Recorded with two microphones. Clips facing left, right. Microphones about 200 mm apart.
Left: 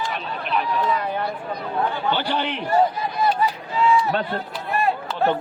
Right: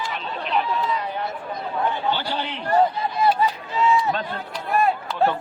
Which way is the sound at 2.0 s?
60° left (ahead or behind).